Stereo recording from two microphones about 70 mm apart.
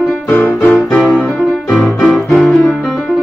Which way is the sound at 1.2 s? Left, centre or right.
Centre.